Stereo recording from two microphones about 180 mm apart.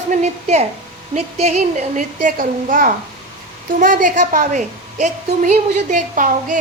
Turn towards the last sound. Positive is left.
turn(degrees=-45)  # may be behind; listen again after turning